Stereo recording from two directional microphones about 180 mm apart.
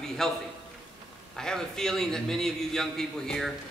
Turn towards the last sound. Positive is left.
turn(degrees=5)  # may be behind; listen again after turning